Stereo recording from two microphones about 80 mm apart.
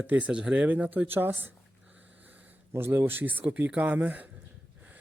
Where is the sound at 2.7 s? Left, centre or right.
Right.